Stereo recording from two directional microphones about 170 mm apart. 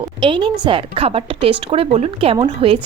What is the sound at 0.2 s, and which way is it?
A woman's voice, 30° right (ahead or behind).